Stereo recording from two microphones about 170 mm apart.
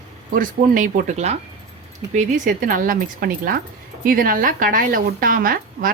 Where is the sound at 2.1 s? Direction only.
45° right (ahead or behind).